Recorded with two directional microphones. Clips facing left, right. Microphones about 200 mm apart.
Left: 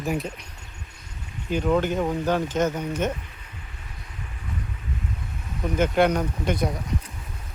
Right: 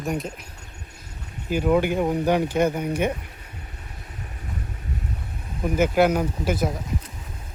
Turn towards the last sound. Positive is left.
turn(degrees=-5)  # may be behind; listen again after turning